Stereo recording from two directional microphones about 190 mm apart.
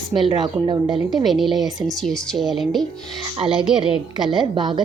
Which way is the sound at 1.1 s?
Centre (ahead or behind).